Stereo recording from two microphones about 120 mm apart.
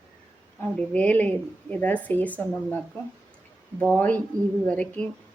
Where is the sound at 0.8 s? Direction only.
10° left (ahead or behind).